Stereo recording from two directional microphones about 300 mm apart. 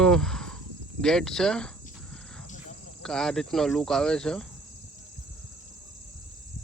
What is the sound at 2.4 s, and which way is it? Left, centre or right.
Cricket, left.